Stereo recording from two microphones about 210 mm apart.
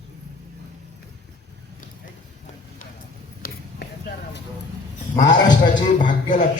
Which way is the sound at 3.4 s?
45° left (ahead or behind).